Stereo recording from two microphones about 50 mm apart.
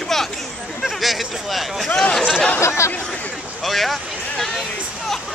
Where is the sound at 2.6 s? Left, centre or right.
Left.